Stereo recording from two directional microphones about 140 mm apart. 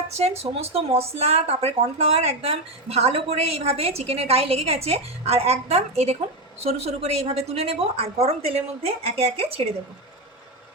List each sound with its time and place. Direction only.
0.1 s speech: 50° right (ahead or behind)